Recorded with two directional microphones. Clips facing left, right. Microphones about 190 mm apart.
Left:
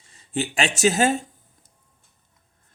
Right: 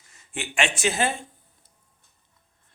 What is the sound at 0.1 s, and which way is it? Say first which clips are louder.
Speech: left 9 dB; 35° left (ahead or behind).